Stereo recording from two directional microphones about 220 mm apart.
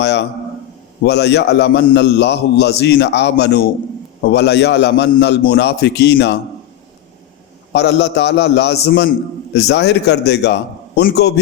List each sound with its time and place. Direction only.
0.0 s a sound: 50° left (ahead or behind)
1.0 s a man's voice: 50° left (ahead or behind)
7.7 s a man's voice: 50° left (ahead or behind)